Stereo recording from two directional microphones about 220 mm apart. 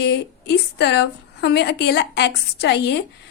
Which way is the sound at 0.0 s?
50° left (ahead or behind).